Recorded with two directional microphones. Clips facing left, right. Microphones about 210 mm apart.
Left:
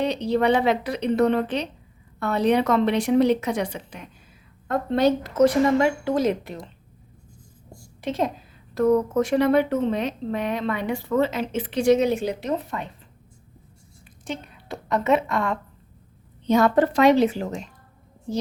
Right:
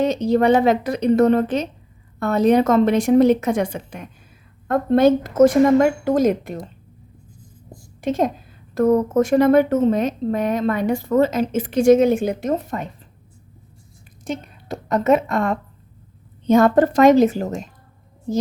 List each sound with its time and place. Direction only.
0.0 s a woman's voice: 45° right (ahead or behind)
8.0 s a woman's voice: 45° right (ahead or behind)
14.3 s a woman's voice: 45° right (ahead or behind)